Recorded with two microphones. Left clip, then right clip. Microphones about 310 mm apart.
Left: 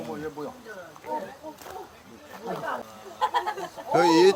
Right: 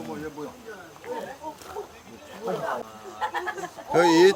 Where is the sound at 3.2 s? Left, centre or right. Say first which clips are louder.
Left 3 dB; left.